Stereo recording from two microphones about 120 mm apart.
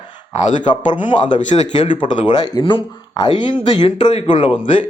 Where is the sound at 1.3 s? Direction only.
90° left.